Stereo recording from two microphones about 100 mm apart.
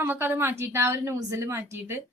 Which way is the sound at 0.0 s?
20° right (ahead or behind).